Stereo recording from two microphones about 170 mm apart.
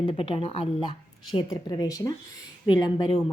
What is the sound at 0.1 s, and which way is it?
Speech, 35° left (ahead or behind).